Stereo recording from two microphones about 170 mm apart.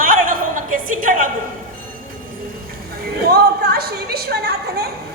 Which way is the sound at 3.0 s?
70° right (ahead or behind).